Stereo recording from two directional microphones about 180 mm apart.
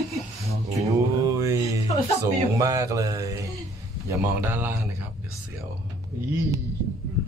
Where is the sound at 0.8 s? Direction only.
20° right (ahead or behind).